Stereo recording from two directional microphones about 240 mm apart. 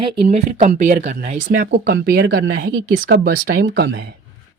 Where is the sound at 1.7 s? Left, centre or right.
Right.